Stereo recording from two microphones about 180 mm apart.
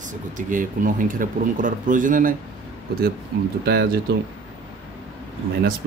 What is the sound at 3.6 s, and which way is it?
Speech, 60° right (ahead or behind).